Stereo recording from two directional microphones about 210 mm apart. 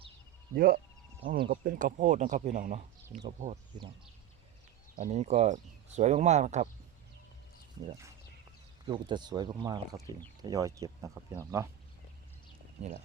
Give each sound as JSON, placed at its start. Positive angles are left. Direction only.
{"t": 0.5, "sound": "speech", "side_deg": -45}
{"t": 4.9, "sound": "speech", "side_deg": -35}
{"t": 8.9, "sound": "speech", "side_deg": -20}